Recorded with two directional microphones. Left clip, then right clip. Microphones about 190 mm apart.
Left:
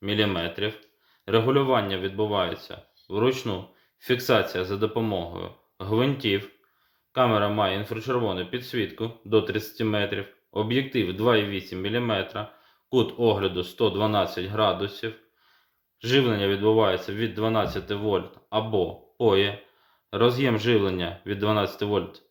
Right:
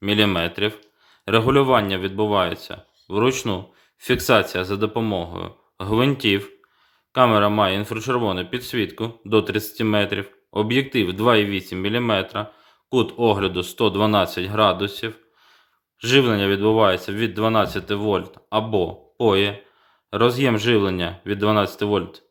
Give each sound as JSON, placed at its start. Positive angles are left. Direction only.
{"t": 0.0, "sound": "speech", "side_deg": -35}